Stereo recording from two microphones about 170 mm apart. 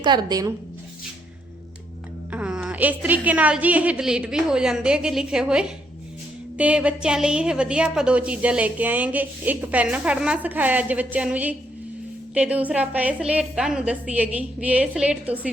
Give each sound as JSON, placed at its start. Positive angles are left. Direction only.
{"t": 0.0, "sound": "a woman's voice", "side_deg": -25}
{"t": 2.3, "sound": "a woman's voice", "side_deg": -5}